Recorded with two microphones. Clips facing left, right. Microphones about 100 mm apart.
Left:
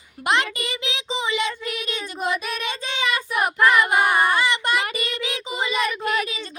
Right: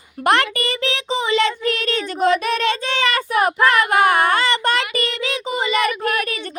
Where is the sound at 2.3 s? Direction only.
60° right (ahead or behind).